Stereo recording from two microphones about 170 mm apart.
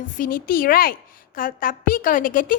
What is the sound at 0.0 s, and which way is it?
A woman's voice, 55° left (ahead or behind).